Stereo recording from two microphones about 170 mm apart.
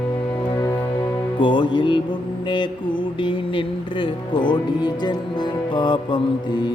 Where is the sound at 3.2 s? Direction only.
30° left (ahead or behind).